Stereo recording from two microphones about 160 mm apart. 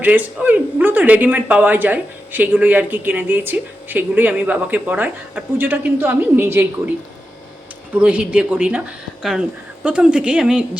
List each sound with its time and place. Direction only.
0.0 s speech: 10° right (ahead or behind)
7.9 s speech: 10° right (ahead or behind)
9.8 s a woman's voice: 5° right (ahead or behind)